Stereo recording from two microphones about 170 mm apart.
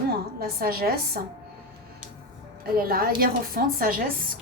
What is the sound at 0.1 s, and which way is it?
A woman's voice, 60° right (ahead or behind).